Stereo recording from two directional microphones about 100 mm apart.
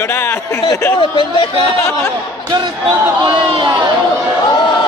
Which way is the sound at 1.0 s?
55° left (ahead or behind).